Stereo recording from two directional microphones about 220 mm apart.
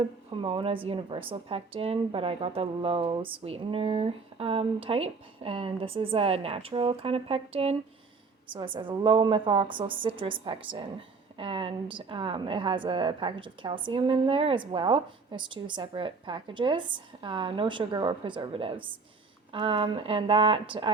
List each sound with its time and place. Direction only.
0.3 s a woman's voice: 25° right (ahead or behind)